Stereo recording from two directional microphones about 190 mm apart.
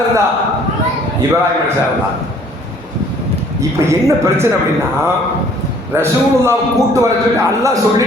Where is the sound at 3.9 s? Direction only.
15° right (ahead or behind).